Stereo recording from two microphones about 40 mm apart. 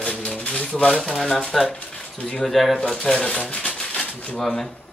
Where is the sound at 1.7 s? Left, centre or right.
Left.